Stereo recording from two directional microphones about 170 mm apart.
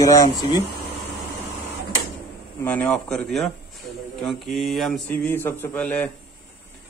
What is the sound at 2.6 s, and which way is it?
Speech, 10° left (ahead or behind).